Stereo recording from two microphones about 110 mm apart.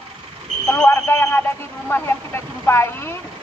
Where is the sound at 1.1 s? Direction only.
20° left (ahead or behind).